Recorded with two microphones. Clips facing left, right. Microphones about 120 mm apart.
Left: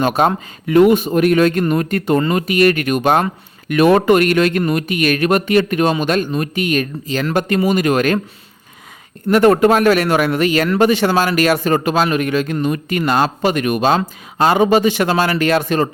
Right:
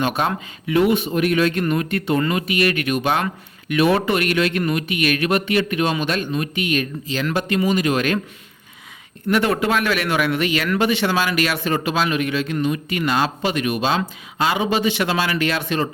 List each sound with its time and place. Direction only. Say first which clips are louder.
0.0 s speech: left 6 dB; 40° left (ahead or behind)
9.3 s speech: left 8 dB; 45° left (ahead or behind)